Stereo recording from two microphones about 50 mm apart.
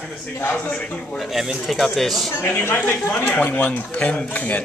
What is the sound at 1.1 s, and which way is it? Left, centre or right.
Speech, centre.